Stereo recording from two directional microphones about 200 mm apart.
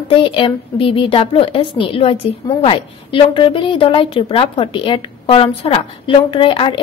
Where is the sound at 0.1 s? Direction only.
25° left (ahead or behind).